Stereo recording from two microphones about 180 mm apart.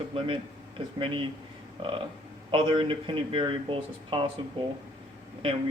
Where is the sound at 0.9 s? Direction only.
30° right (ahead or behind).